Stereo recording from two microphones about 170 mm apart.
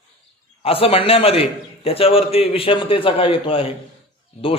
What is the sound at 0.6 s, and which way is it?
A man's voice, 35° left (ahead or behind).